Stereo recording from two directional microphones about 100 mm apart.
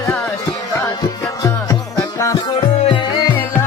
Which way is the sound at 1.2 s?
35° left (ahead or behind).